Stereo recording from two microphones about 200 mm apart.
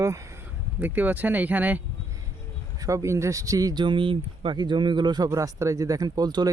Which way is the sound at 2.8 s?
15° right (ahead or behind).